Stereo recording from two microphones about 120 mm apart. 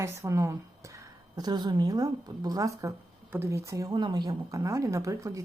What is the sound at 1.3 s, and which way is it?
A woman's voice, 35° right (ahead or behind).